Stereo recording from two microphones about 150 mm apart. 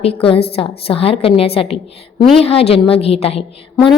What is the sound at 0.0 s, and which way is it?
A woman's voice, 40° left (ahead or behind).